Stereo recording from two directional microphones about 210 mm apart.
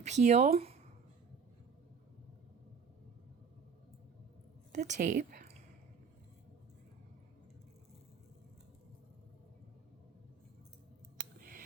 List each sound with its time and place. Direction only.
0.0 s speech: 35° right (ahead or behind)
4.7 s speech: 35° right (ahead or behind)